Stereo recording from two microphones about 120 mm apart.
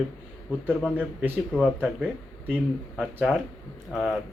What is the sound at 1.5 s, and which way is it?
Speech, 5° left (ahead or behind).